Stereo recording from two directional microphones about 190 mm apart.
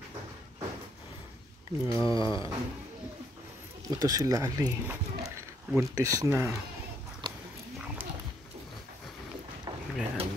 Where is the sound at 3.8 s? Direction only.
20° right (ahead or behind).